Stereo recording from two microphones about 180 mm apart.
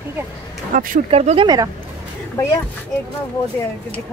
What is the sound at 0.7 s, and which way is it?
Speech, 45° right (ahead or behind).